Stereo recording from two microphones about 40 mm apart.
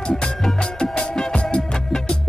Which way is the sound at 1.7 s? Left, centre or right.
Centre.